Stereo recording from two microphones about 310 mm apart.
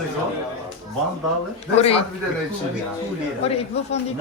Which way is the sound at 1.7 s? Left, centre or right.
Centre.